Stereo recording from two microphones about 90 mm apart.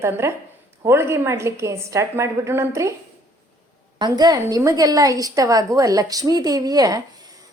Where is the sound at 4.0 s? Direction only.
50° right (ahead or behind).